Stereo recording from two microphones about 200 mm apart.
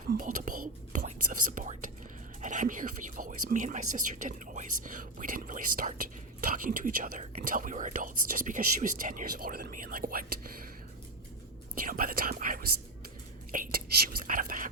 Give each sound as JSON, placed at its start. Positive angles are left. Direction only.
{"t": 0.1, "sound": "whispering", "side_deg": -40}
{"t": 3.5, "sound": "speech", "side_deg": -40}
{"t": 11.7, "sound": "whispering", "side_deg": -45}
{"t": 13.5, "sound": "speech", "side_deg": -45}